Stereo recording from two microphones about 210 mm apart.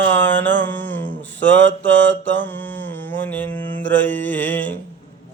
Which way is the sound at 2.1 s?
60° right (ahead or behind).